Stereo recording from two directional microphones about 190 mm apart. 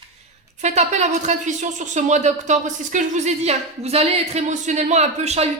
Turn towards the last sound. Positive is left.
turn(degrees=-35)  # may be behind; listen again after turning